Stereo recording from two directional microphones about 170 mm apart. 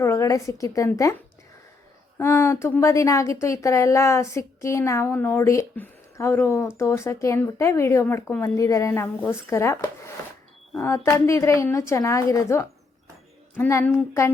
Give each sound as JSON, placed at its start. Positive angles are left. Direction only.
{"t": 0.0, "sound": "a woman's voice", "side_deg": 15}
{"t": 2.1, "sound": "speech", "side_deg": 15}
{"t": 10.8, "sound": "speech", "side_deg": 15}